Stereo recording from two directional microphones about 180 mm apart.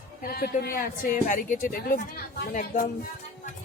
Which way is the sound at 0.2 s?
60° left (ahead or behind).